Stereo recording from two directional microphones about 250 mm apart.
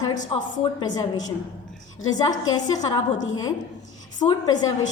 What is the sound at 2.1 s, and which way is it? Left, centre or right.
A woman's voice, centre.